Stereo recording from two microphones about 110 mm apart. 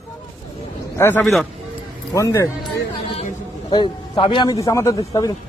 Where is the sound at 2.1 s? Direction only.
30° left (ahead or behind).